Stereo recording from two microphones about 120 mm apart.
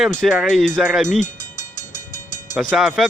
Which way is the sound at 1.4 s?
90° left.